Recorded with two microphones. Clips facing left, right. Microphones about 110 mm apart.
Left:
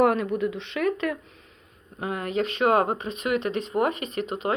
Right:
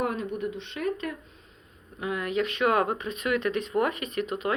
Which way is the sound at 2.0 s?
35° left (ahead or behind).